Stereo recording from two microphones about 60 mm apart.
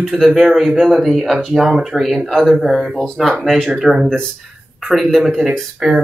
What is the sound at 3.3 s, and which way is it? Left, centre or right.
Speech, centre.